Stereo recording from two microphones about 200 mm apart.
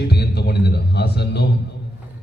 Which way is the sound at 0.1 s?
55° left (ahead or behind).